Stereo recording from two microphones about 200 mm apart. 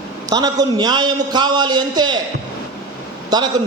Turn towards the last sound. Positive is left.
turn(degrees=-20)  # may be behind; listen again after turning